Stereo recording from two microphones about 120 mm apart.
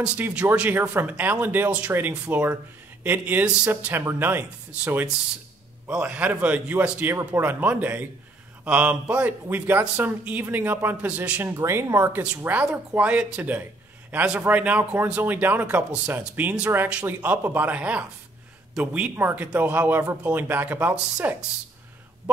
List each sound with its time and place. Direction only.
0.0 s speech: 10° right (ahead or behind)